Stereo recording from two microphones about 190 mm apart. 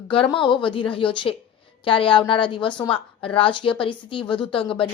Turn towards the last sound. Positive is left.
turn(degrees=25)  # may be behind; listen again after turning